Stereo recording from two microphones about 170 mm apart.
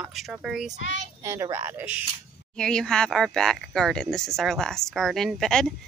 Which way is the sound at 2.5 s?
5° left (ahead or behind).